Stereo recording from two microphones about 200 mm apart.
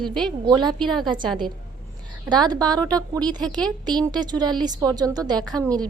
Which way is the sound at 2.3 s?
20° right (ahead or behind).